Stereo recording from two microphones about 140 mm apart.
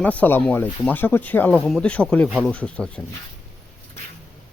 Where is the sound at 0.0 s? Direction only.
10° left (ahead or behind).